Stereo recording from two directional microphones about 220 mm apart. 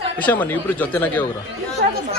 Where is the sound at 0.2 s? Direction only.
10° left (ahead or behind).